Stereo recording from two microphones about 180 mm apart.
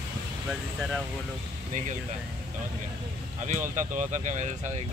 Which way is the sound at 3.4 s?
45° right (ahead or behind).